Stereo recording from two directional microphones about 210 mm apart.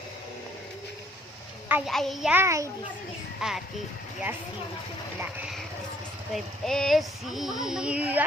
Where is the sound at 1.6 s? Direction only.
5° right (ahead or behind).